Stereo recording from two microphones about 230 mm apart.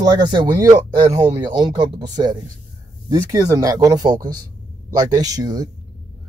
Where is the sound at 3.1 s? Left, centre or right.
Centre.